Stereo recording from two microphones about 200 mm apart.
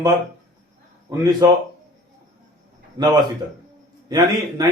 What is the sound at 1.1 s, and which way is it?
Speech, 15° right (ahead or behind).